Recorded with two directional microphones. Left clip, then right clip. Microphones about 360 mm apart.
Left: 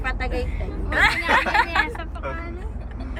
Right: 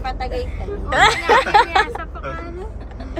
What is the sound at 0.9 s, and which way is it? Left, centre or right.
Speech, centre.